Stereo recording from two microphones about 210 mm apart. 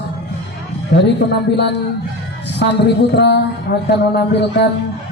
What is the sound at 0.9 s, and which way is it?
Speech, 55° left (ahead or behind).